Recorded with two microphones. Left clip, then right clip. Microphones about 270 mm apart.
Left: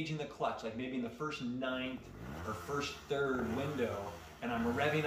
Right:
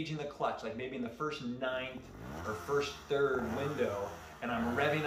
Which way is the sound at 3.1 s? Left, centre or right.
Centre.